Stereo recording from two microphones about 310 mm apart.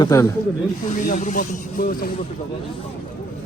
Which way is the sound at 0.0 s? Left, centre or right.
Centre.